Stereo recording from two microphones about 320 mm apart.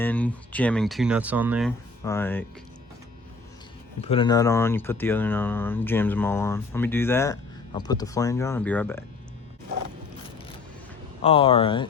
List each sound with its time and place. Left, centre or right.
0.0 s speech: centre
2.0 s speech: centre
4.0 s speech: centre
11.2 s speech: centre